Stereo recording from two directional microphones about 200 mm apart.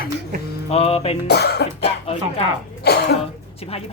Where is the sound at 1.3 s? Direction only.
55° left (ahead or behind).